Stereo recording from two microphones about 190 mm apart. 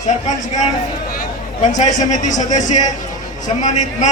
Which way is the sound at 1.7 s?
40° left (ahead or behind).